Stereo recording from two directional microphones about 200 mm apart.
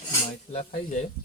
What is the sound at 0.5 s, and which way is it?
Speech, 35° left (ahead or behind).